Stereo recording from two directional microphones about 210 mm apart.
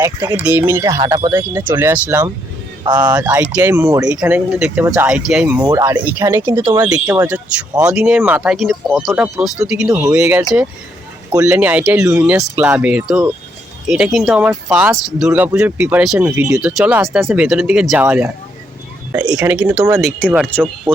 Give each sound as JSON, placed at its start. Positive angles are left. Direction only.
{"t": 0.0, "sound": "speech", "side_deg": -15}
{"t": 9.9, "sound": "speech", "side_deg": -15}
{"t": 19.4, "sound": "speech", "side_deg": -5}